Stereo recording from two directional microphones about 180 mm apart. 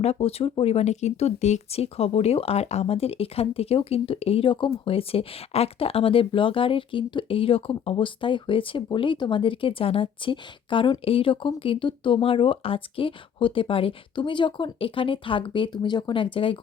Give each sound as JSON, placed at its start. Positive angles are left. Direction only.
{"t": 0.0, "sound": "speech", "side_deg": 35}